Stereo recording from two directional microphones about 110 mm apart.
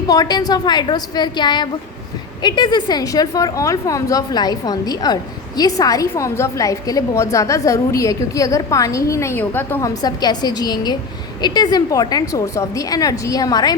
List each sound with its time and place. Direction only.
0.1 s a woman's voice: 35° left (ahead or behind); by 9.8 s 20° left (ahead or behind)
9.8 s a woman's voice: 35° left (ahead or behind)